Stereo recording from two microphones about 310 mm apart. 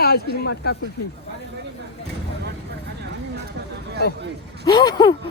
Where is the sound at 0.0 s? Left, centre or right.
Left.